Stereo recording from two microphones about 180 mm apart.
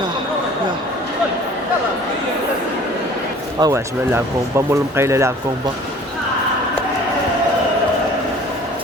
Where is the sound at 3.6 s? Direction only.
15° right (ahead or behind).